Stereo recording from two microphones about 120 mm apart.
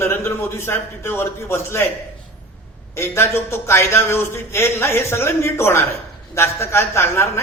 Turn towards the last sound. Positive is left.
turn(degrees=20)  # may be behind; listen again after turning